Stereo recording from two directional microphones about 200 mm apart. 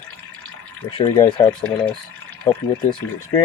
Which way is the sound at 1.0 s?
25° left (ahead or behind).